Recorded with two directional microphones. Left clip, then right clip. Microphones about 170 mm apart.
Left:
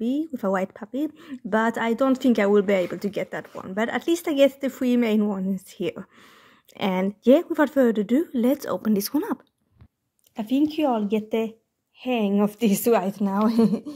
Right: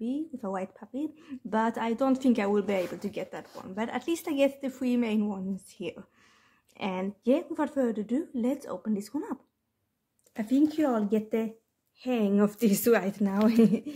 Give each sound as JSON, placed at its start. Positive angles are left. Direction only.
{"t": 0.0, "sound": "speech", "side_deg": 35}
{"t": 10.7, "sound": "a woman's voice", "side_deg": 15}
{"t": 13.3, "sound": "speech", "side_deg": -15}